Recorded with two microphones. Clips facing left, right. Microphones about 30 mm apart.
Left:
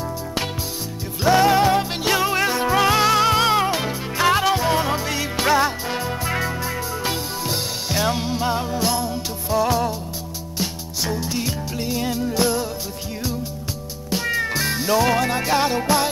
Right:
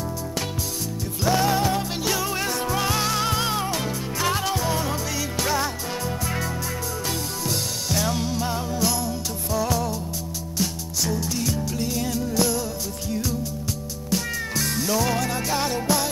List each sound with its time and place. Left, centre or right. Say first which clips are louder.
1.2 s music: left 6 dB; left